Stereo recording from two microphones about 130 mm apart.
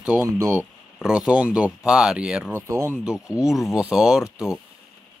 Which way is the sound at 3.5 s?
Centre (ahead or behind).